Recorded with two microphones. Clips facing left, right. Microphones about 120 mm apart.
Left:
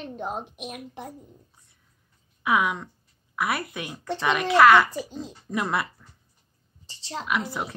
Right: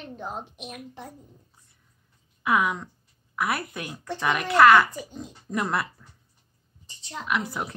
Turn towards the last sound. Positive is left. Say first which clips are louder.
# even
turn(degrees=0)  # may be behind; listen again after turning